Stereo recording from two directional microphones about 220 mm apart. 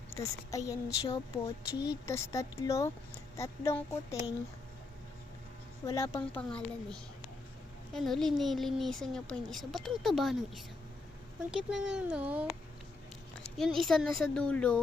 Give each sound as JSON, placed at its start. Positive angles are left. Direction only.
{"t": 0.1, "sound": "speech", "side_deg": 15}
{"t": 1.7, "sound": "a woman's voice", "side_deg": 50}
{"t": 2.0, "sound": "speech", "side_deg": 15}
{"t": 5.8, "sound": "a woman's voice", "side_deg": 15}
{"t": 13.7, "sound": "a woman's voice", "side_deg": 0}